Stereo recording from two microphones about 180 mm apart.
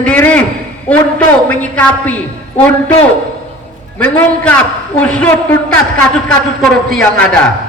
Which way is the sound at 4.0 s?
10° left (ahead or behind).